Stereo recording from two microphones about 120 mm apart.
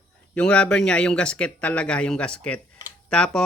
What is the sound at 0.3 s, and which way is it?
Speech, 10° left (ahead or behind).